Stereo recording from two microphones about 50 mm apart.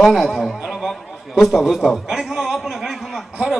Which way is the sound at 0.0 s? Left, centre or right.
Centre.